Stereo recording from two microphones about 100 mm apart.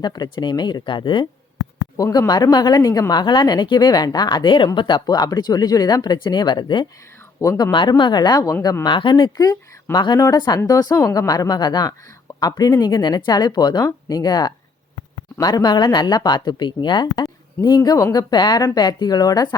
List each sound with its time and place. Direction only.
0.0 s speech: 45° left (ahead or behind)
2.0 s speech: 35° left (ahead or behind)
8.8 s speech: 55° left (ahead or behind)